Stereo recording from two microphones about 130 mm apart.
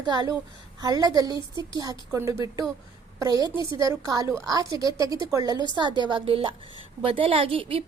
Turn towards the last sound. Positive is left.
turn(degrees=-45)  # may be behind; listen again after turning